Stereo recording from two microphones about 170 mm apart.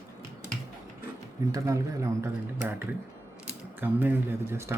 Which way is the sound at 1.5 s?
20° right (ahead or behind).